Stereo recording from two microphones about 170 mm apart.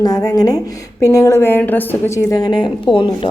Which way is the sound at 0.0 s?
20° left (ahead or behind).